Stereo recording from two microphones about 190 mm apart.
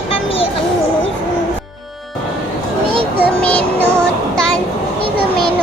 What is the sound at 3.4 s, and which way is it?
Music, 5° left (ahead or behind).